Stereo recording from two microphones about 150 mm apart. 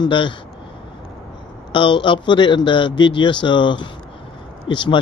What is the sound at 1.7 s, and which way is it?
A man's voice, 35° left (ahead or behind).